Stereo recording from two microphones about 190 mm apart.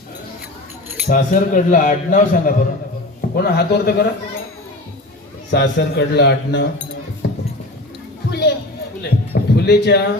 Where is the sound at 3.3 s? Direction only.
55° left (ahead or behind).